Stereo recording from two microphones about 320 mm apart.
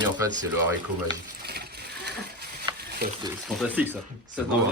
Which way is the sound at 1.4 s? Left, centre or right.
Right.